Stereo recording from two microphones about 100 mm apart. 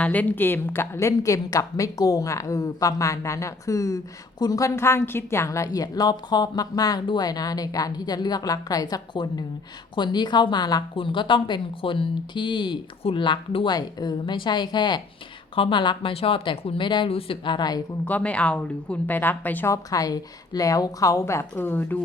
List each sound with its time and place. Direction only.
0.0 s a woman's voice: 15° left (ahead or behind); by 10.8 s 45° left (ahead or behind)
10.9 s speech: 55° left (ahead or behind)
13.0 s speech: 80° left
13.2 s speech: 55° left (ahead or behind)
13.7 s speech: 45° left (ahead or behind)
15.5 s speech: 60° left (ahead or behind)
16.1 s speech: 65° left (ahead or behind); by 17.8 s 45° left (ahead or behind)
18.0 s a woman's voice: 15° left (ahead or behind)
19.7 s a woman's voice: 35° left (ahead or behind); by 21.9 s 20° left (ahead or behind)